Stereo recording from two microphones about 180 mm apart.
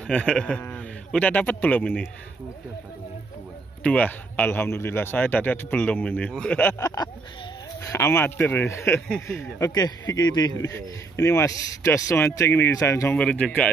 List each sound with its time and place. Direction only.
0.0 s speech: 5° left (ahead or behind)
3.8 s a man's voice: 10° left (ahead or behind)